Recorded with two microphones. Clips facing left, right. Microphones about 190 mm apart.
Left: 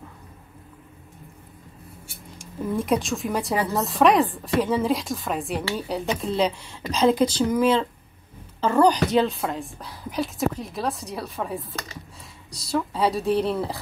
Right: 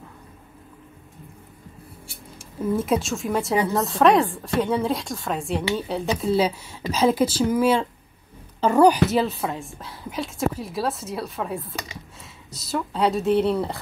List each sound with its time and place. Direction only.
2.6 s a woman's voice: centre (ahead or behind)
12.7 s a woman's voice: centre (ahead or behind)